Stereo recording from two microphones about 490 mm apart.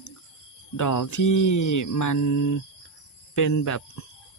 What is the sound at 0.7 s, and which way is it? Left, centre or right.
Mantra, left.